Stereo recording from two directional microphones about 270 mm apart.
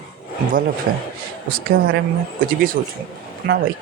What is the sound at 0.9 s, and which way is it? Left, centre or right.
Speech, right.